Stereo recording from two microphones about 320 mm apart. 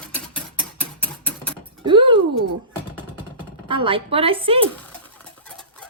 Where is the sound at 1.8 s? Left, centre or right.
Centre.